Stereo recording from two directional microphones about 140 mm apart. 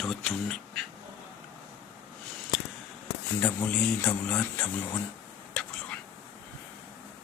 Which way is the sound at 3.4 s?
10° left (ahead or behind).